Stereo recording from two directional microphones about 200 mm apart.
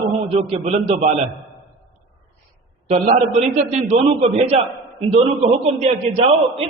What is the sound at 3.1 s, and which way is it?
A man's voice, 35° right (ahead or behind).